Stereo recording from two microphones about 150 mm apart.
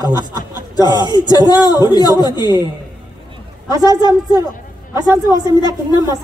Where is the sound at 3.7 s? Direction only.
25° right (ahead or behind).